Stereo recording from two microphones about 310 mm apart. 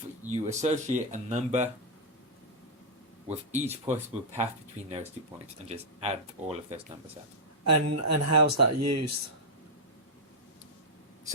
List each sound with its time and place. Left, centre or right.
0.3 s speech: right
3.2 s speech: right
7.6 s speech: right